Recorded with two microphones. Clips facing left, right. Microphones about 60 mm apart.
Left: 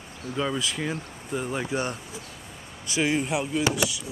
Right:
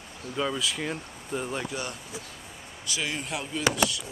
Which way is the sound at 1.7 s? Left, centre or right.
Left.